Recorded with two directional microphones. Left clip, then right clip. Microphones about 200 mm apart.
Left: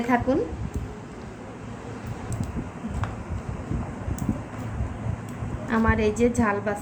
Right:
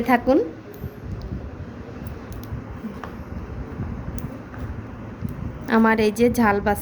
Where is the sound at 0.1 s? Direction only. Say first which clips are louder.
Right 4 dB; 45° right (ahead or behind).